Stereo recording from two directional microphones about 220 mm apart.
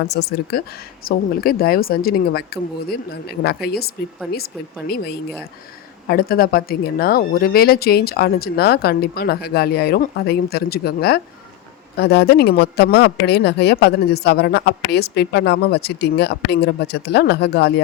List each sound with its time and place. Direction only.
0.0 s a woman's voice: 45° left (ahead or behind)
6.1 s a woman's voice: 45° left (ahead or behind)